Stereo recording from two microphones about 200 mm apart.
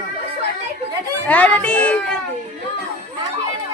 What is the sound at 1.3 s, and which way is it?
Speech, 5° left (ahead or behind).